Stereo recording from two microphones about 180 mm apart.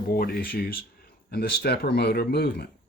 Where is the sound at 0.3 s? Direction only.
55° left (ahead or behind).